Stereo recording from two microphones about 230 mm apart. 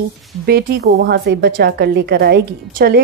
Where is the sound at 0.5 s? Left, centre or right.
Right.